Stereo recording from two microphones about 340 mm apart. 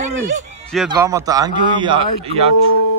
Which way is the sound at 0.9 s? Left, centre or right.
Centre.